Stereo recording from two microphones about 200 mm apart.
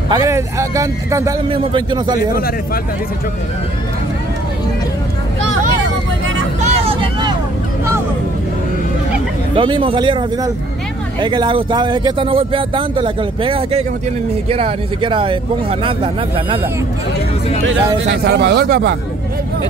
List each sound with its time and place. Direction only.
0.1 s a man's voice: 15° right (ahead or behind)
2.3 s speech: 50° left (ahead or behind)
6.6 s vehicle: 25° right (ahead or behind)
9.6 s speech: 25° right (ahead or behind)
18.1 s speech: 55° right (ahead or behind)